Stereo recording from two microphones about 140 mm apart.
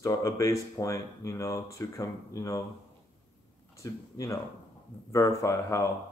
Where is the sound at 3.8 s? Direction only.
20° left (ahead or behind).